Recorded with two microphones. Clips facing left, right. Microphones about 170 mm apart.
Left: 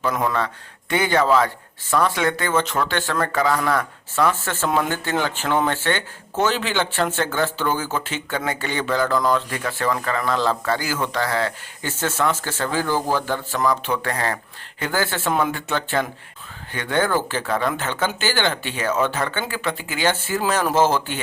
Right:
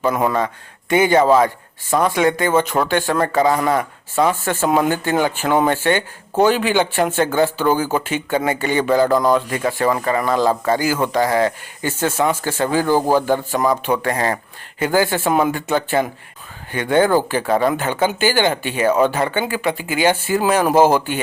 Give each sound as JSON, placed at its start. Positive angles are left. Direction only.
{"t": 0.1, "sound": "a man's voice", "side_deg": -10}